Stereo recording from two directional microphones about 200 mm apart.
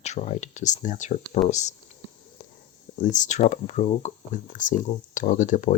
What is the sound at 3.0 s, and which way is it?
Speech, 40° left (ahead or behind).